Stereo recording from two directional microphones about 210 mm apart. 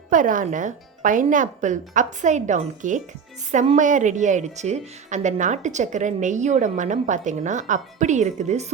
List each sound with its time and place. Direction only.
0.1 s a woman's voice: 40° right (ahead or behind)